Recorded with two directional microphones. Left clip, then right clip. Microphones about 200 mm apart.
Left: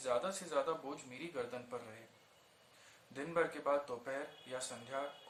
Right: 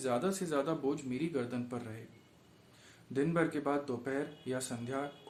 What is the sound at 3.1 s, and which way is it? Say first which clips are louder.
Speech: right 5 dB; 50° right (ahead or behind).